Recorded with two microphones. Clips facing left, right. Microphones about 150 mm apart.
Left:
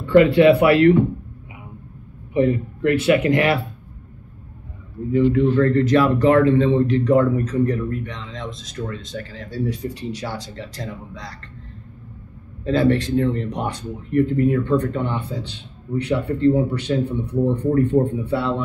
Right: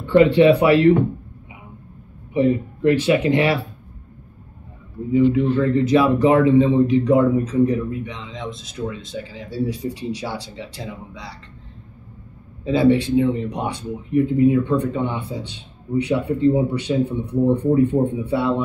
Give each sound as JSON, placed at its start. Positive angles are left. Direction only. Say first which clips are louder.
{"t": 0.0, "sound": "speech", "louder": "even", "side_deg": -30}
{"t": 2.3, "sound": "speech", "louder": "even", "side_deg": -25}
{"t": 5.1, "sound": "speech", "louder": "even", "side_deg": -10}
{"t": 12.9, "sound": "speech", "louder": "right 2 dB", "side_deg": -10}